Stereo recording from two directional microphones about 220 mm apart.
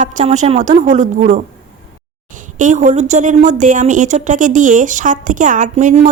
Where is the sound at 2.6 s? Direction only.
35° right (ahead or behind).